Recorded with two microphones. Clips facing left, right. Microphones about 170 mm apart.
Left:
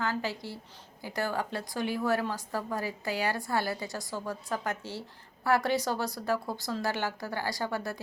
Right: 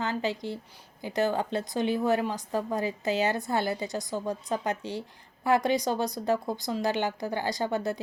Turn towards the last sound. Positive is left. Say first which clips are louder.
# right 5 dB
turn(degrees=-20)  # may be behind; listen again after turning